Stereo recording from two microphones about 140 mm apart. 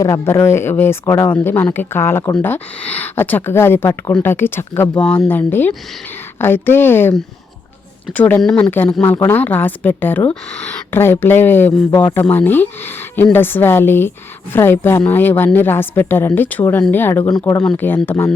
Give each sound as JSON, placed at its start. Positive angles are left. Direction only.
{"t": 0.0, "sound": "speech", "side_deg": 20}
{"t": 8.1, "sound": "speech", "side_deg": 10}